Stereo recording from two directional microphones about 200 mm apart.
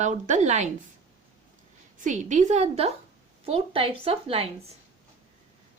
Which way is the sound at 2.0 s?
40° right (ahead or behind).